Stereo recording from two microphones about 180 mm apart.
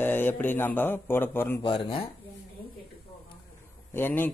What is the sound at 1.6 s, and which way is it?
Speech, 30° left (ahead or behind).